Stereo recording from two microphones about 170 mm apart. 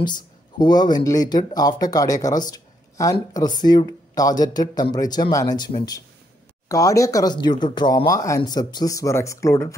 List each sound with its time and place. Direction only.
0.0 s speech: 25° left (ahead or behind)
6.7 s speech: 20° left (ahead or behind)